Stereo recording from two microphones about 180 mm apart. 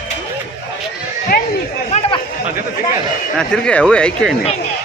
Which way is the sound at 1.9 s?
35° left (ahead or behind).